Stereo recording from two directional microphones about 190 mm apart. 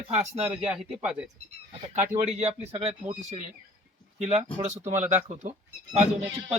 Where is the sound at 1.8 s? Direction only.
40° right (ahead or behind).